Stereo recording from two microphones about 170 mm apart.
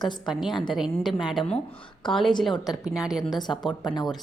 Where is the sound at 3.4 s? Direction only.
25° left (ahead or behind).